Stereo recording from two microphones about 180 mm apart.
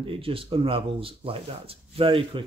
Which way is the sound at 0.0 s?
30° right (ahead or behind).